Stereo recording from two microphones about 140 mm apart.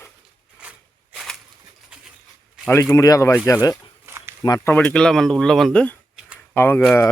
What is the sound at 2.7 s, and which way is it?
Speech, 20° left (ahead or behind).